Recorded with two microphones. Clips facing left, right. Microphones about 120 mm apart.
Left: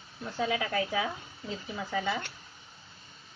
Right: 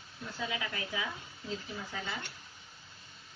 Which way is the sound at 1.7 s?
90° left.